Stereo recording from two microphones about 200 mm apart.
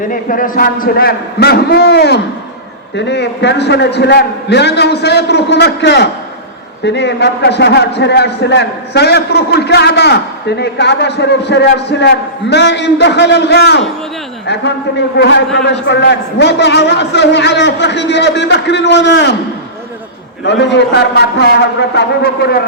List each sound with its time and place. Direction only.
0.1 s a man's voice: 45° left (ahead or behind); by 19.4 s 60° left (ahead or behind)
20.4 s a man's voice: 60° left (ahead or behind)